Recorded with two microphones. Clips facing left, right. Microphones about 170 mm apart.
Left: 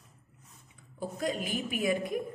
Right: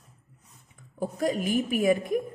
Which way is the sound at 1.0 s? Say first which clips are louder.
Right 6 dB; 45° right (ahead or behind).